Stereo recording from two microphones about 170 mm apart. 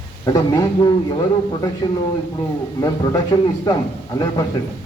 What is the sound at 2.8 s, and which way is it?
A man's voice, 20° left (ahead or behind).